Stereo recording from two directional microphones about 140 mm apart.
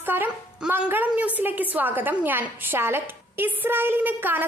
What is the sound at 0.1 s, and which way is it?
A woman's voice, 15° right (ahead or behind).